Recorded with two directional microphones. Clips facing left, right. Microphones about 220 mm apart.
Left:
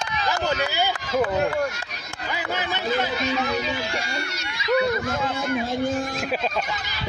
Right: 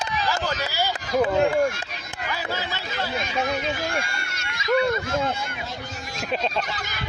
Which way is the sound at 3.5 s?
50° right (ahead or behind).